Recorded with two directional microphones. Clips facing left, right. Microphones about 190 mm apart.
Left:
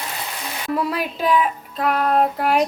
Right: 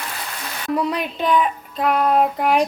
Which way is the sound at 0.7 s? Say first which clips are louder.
Right 1 dB; 5° left (ahead or behind).